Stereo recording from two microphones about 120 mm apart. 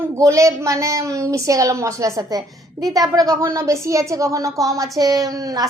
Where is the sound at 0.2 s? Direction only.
25° right (ahead or behind).